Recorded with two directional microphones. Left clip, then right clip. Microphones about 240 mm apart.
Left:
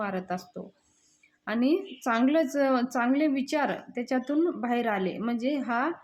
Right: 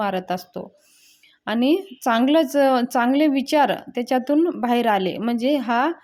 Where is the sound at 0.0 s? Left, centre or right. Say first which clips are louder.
Right 8 dB; right.